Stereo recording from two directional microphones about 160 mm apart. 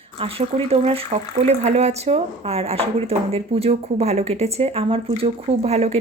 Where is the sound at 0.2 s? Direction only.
35° right (ahead or behind).